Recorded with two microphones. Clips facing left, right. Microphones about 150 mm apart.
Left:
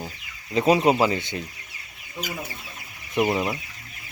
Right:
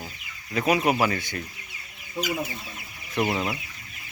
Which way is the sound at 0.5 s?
25° left (ahead or behind).